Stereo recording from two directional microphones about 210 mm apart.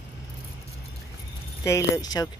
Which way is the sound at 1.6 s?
15° left (ahead or behind).